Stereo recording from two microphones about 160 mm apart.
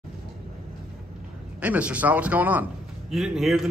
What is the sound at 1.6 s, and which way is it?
A man's voice, 10° right (ahead or behind).